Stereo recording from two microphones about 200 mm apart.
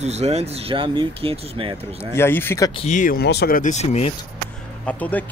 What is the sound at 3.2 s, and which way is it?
Speech, 55° left (ahead or behind).